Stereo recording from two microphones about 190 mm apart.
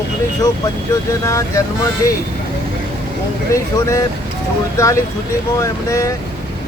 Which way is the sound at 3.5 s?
15° left (ahead or behind).